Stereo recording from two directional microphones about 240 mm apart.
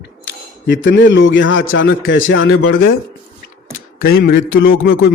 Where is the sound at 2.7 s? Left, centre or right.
Left.